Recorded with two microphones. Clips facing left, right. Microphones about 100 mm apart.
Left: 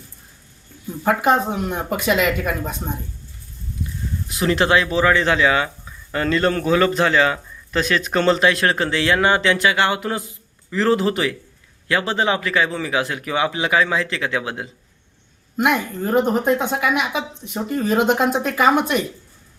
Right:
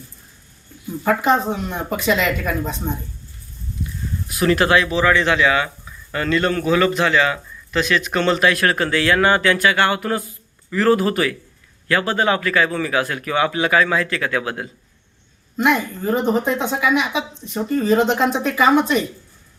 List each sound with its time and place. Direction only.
1.0 s speech: 5° left (ahead or behind)
4.3 s speech: 25° left (ahead or behind)
15.5 s speech: 5° left (ahead or behind)